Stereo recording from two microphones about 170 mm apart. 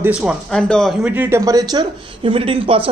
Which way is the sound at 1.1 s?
15° right (ahead or behind).